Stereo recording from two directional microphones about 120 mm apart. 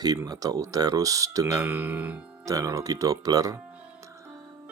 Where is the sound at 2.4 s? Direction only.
30° right (ahead or behind).